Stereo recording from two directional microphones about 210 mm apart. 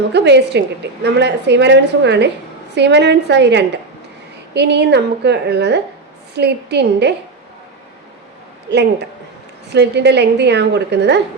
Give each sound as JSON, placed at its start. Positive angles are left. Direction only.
{"t": 0.1, "sound": "a woman's voice", "side_deg": -55}
{"t": 8.7, "sound": "a woman's voice", "side_deg": -55}